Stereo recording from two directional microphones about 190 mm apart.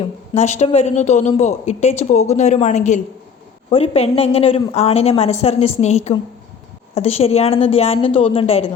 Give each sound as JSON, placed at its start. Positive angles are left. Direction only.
{"t": 0.0, "sound": "a woman's voice", "side_deg": 35}